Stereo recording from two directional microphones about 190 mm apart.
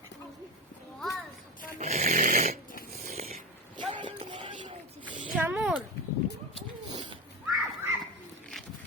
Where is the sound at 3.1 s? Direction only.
35° right (ahead or behind).